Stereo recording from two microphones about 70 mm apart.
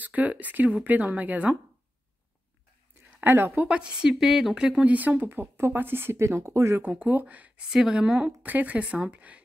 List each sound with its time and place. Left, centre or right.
0.0 s a woman's voice: right
3.2 s a woman's voice: right
3.6 s a woman's voice: centre
4.8 s speech: right
6.8 s a woman's voice: right
7.7 s a woman's voice: centre